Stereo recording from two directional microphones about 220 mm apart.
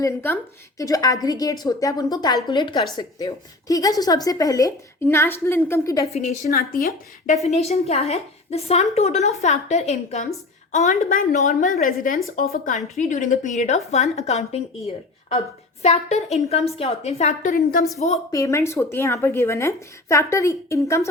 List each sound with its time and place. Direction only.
0.0 s a woman's voice: 10° left (ahead or behind)
6.5 s a woman's voice: 40° left (ahead or behind)
7.4 s a woman's voice: 30° left (ahead or behind)
18.3 s a woman's voice: 15° left (ahead or behind)